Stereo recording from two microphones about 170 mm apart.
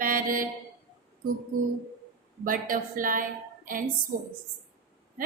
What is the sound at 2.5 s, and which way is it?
Speech, 55° right (ahead or behind).